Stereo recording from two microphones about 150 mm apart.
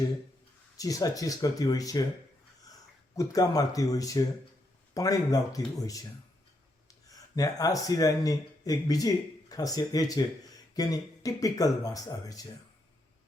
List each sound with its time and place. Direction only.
0.8 s speech: 20° left (ahead or behind)
3.2 s speech: 25° left (ahead or behind)
7.1 s speech: 25° left (ahead or behind)